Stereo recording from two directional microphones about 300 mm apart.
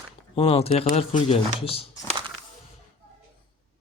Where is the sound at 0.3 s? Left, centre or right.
Centre.